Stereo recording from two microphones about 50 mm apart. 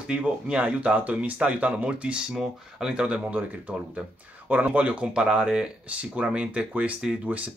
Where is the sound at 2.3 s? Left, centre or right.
Centre.